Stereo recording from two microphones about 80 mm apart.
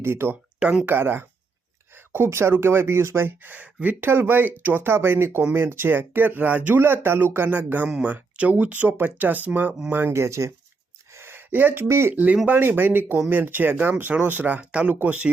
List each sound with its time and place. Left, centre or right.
0.0 s speech: right
0.6 s speech: centre
0.9 s speech: right
10.1 s speech: right
11.1 s gasp: right
12.1 s speech: centre